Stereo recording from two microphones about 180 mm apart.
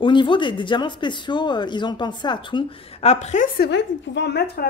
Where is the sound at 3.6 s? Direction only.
75° left (ahead or behind).